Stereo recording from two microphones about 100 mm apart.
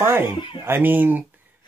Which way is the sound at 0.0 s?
25° right (ahead or behind).